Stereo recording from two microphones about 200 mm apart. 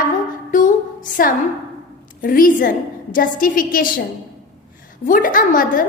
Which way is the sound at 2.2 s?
45° left (ahead or behind).